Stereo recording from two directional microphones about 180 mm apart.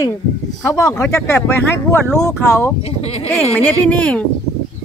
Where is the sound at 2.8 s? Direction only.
35° left (ahead or behind).